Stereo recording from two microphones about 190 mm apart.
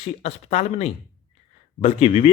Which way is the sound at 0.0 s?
35° left (ahead or behind).